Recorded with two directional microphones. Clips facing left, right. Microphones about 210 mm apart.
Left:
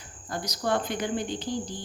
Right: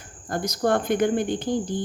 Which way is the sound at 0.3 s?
50° right (ahead or behind).